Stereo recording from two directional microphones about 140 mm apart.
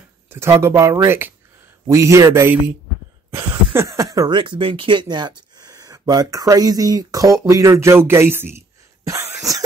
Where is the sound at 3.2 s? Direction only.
20° right (ahead or behind).